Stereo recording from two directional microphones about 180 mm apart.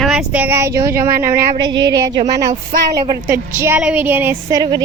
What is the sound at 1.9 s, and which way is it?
Child singing, 20° right (ahead or behind).